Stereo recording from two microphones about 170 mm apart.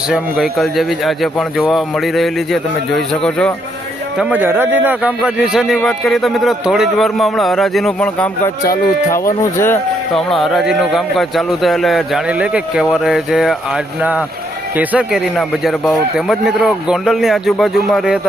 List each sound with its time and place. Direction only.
0.1 s a man's voice: centre (ahead or behind)
4.2 s a man's voice: 10° right (ahead or behind); by 9.7 s 15° left (ahead or behind)
10.2 s a man's voice: centre (ahead or behind)